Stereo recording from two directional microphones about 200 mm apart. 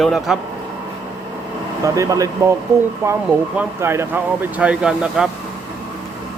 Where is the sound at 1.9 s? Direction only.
15° right (ahead or behind).